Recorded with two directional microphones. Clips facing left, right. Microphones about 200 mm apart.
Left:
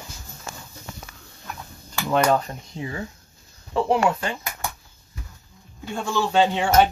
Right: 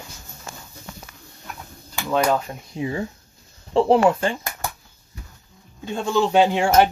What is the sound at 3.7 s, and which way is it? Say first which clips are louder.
Speech: right 5 dB; 30° right (ahead or behind).